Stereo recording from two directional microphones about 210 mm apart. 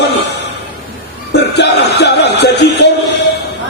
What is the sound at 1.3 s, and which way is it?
Music, 55° left (ahead or behind).